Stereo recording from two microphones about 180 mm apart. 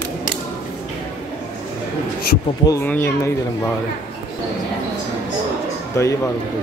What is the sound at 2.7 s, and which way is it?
Speech, 15° left (ahead or behind).